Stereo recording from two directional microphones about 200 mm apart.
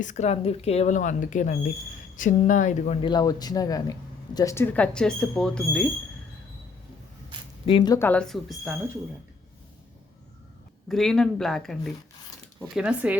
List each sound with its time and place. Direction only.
0.0 s speech: 35° left (ahead or behind); by 5.9 s 5° left (ahead or behind)
7.6 s speech: 25° left (ahead or behind)
7.9 s speech: 10° left (ahead or behind)
10.8 s speech: centre (ahead or behind)